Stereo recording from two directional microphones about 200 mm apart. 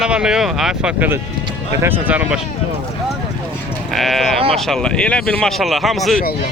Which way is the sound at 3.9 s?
Centre (ahead or behind).